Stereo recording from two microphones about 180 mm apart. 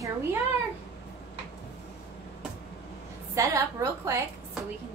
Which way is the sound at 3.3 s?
15° right (ahead or behind).